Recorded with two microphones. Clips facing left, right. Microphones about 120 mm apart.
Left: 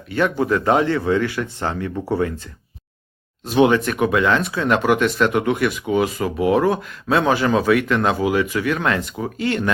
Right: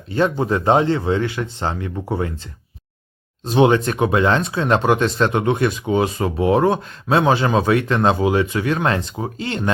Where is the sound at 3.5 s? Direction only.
25° right (ahead or behind).